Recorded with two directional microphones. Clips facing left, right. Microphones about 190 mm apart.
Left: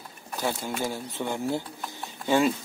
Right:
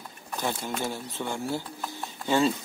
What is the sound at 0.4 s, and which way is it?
Speech, 10° left (ahead or behind).